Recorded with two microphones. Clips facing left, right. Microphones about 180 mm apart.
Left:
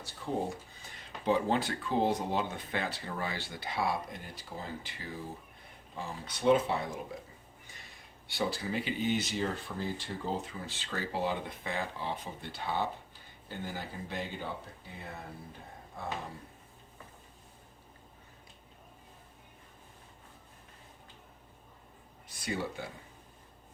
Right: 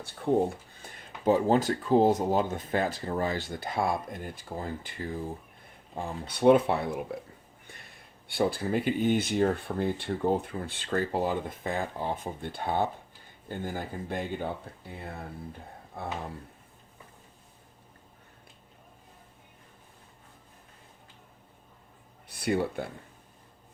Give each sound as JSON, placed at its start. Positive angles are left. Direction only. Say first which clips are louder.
{"t": 0.2, "sound": "speech", "louder": "right 9 dB", "side_deg": -60}
{"t": 8.3, "sound": "speech", "louder": "right 6 dB", "side_deg": -55}
{"t": 22.3, "sound": "speech", "louder": "right 8 dB", "side_deg": -60}